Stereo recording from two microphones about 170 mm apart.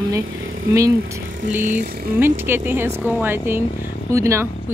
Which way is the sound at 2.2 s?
15° right (ahead or behind).